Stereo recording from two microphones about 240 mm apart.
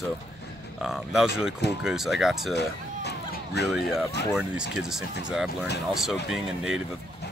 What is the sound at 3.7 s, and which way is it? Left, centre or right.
Speech, centre.